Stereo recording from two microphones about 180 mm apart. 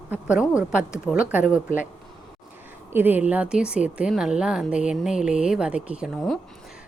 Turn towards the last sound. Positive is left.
turn(degrees=-5)  # may be behind; listen again after turning